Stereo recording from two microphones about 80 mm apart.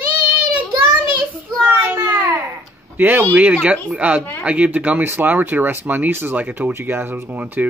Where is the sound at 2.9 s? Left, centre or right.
Right.